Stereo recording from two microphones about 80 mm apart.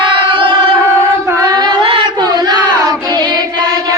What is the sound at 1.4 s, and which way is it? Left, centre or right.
Singing, right.